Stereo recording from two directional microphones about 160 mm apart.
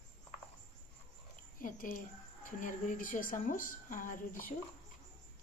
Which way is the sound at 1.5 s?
60° left (ahead or behind).